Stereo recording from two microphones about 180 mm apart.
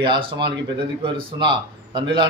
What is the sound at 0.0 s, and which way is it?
A man's voice, 25° right (ahead or behind).